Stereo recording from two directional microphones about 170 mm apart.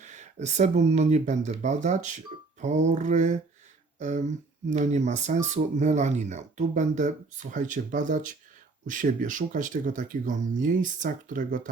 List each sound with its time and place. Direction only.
0.0 s speech: 45° right (ahead or behind)